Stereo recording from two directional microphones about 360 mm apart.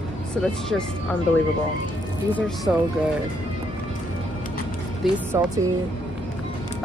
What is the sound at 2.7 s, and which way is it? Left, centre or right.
Speech, centre.